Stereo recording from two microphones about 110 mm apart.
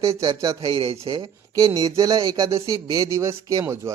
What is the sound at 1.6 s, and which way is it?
A man's voice, 30° right (ahead or behind).